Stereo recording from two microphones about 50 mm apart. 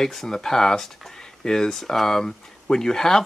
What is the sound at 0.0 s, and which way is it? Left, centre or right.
Speech, centre.